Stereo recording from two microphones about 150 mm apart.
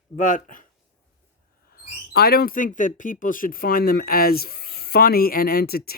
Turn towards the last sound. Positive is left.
turn(degrees=90)